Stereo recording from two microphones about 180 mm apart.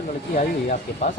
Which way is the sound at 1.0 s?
40° left (ahead or behind).